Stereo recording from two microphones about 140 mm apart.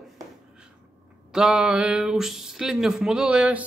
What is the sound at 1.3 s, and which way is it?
Speech, 5° right (ahead or behind).